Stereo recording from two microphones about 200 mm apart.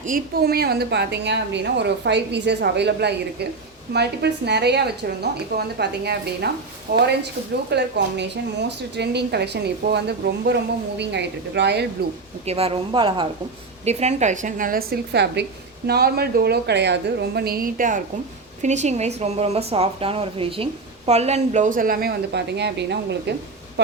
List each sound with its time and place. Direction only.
0.0 s a woman's voice: 45° right (ahead or behind)
6.9 s speech: 40° right (ahead or behind)
7.7 s a woman's voice: 55° right (ahead or behind)
12.5 s a woman's voice: 30° right (ahead or behind); by 23.3 s 60° right (ahead or behind)